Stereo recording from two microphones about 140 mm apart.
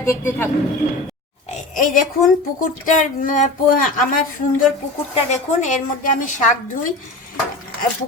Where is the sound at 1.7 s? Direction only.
70° left (ahead or behind).